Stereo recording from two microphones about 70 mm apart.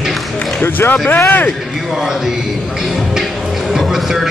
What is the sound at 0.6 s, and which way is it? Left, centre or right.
Speech, left.